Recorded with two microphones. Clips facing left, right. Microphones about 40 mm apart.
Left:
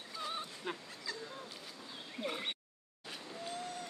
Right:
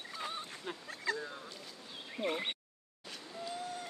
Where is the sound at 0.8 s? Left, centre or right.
Right.